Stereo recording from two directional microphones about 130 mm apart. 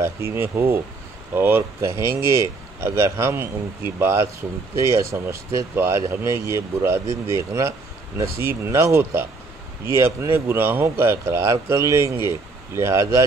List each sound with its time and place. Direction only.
0.0 s speech: 20° right (ahead or behind)